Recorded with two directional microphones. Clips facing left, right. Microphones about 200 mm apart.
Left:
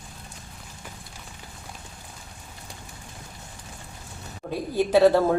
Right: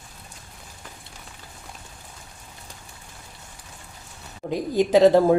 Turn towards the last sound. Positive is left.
turn(degrees=-15)  # may be behind; listen again after turning